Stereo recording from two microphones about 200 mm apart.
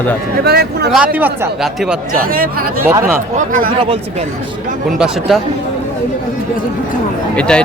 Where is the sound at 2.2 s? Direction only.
45° right (ahead or behind).